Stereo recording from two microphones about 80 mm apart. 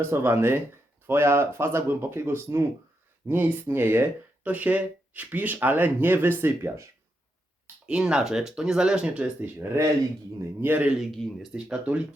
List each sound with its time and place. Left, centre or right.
0.1 s speech: right
6.4 s speech: right
7.9 s speech: centre
9.6 s speech: right
10.6 s speech: right
10.9 s speech: centre